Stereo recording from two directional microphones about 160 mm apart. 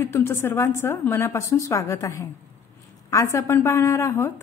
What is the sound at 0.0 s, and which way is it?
A woman's voice, 15° left (ahead or behind).